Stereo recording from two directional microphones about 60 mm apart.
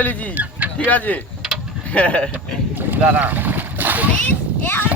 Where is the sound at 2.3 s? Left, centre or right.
Right.